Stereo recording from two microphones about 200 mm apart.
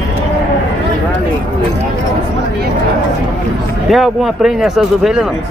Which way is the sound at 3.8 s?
Centre (ahead or behind).